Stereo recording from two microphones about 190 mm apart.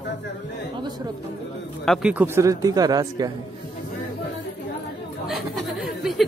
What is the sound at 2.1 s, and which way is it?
Speech, 10° right (ahead or behind).